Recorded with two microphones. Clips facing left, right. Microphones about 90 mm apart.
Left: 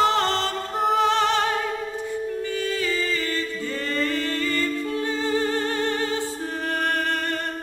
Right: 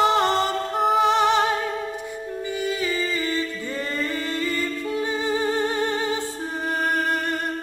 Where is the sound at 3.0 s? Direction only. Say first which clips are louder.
Right 1 dB; 10° right (ahead or behind).